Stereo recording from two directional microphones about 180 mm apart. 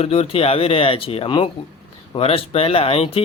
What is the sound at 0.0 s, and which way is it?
Speech, 35° left (ahead or behind).